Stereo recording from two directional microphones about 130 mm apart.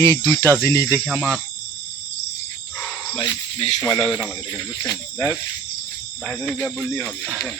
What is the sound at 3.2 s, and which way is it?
Speech, 35° left (ahead or behind).